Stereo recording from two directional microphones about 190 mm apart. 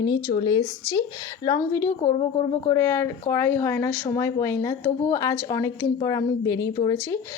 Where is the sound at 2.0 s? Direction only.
25° left (ahead or behind).